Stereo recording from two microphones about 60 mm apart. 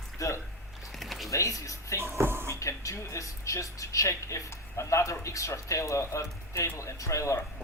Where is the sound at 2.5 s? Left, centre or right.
Left.